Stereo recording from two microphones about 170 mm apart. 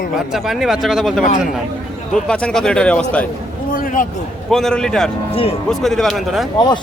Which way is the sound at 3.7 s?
55° left (ahead or behind).